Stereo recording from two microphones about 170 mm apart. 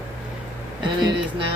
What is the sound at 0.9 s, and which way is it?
Speech, 25° right (ahead or behind).